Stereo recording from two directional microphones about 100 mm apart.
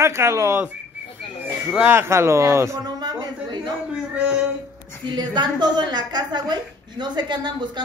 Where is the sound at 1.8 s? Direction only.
25° right (ahead or behind).